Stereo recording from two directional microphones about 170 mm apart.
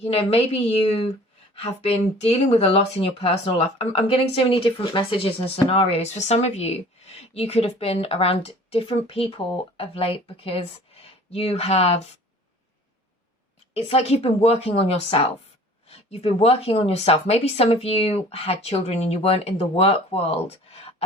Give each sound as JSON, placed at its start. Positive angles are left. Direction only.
{"t": 0.0, "sound": "speech", "side_deg": 35}
{"t": 13.7, "sound": "speech", "side_deg": 35}